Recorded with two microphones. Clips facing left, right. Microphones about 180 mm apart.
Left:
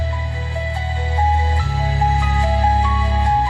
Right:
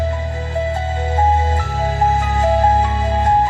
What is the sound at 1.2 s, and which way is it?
Music, 45° right (ahead or behind).